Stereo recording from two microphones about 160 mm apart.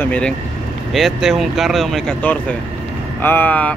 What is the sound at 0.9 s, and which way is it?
Speech, centre (ahead or behind).